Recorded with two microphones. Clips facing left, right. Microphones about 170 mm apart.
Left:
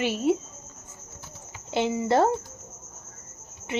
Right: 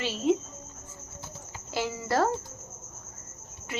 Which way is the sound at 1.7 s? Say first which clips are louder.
Left 6 dB; 20° left (ahead or behind).